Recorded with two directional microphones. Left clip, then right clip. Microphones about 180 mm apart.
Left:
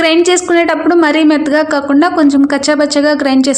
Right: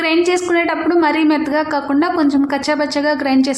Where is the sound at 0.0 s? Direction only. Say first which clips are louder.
Left 5 dB; 30° left (ahead or behind).